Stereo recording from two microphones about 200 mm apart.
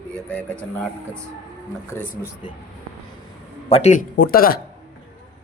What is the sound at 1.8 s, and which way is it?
Speech, 10° left (ahead or behind).